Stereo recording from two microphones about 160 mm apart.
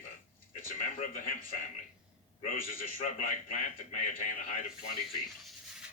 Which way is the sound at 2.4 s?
55° left (ahead or behind).